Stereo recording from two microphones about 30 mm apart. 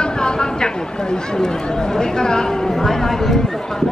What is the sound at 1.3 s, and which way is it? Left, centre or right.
Speech, left.